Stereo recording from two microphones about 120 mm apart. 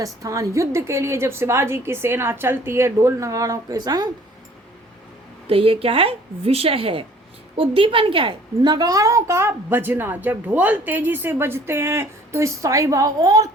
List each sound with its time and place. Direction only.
0.0 s a woman's voice: 25° right (ahead or behind)
5.5 s a woman's voice: 50° right (ahead or behind); by 13.5 s 30° right (ahead or behind)